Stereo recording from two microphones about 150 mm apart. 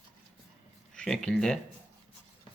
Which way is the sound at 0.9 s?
5° left (ahead or behind).